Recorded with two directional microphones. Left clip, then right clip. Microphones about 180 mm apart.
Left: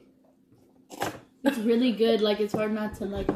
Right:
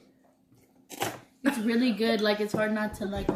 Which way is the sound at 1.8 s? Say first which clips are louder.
Left 1 dB; 20° right (ahead or behind).